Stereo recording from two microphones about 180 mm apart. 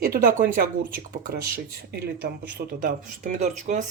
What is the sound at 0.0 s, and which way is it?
Speech, 55° right (ahead or behind).